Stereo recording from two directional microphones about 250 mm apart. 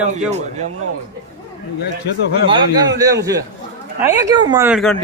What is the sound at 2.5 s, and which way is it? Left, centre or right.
A man's voice, centre.